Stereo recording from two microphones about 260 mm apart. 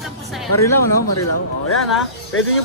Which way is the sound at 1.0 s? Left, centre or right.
Left.